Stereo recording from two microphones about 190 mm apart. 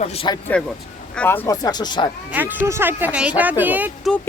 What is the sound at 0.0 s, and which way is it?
Speech, 35° left (ahead or behind).